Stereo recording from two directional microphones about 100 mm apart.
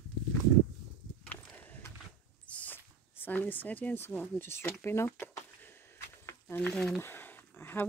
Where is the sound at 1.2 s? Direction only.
15° left (ahead or behind).